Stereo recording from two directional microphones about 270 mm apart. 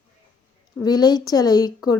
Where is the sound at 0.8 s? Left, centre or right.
Centre.